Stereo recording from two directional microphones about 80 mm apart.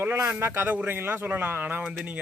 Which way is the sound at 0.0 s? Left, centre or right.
Right.